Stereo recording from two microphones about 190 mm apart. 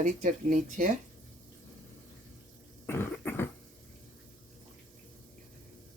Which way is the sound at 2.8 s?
10° left (ahead or behind).